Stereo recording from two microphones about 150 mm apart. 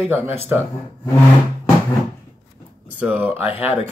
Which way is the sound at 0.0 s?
15° right (ahead or behind).